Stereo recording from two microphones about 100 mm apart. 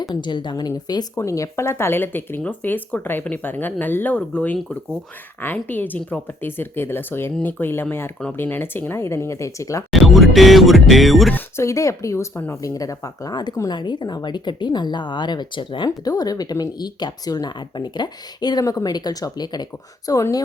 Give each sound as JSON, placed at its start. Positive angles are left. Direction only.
{"t": 0.0, "sound": "speech", "side_deg": 45}
{"t": 1.1, "sound": "speech", "side_deg": 30}
{"t": 9.9, "sound": "speech", "side_deg": 0}
{"t": 11.3, "sound": "speech", "side_deg": 30}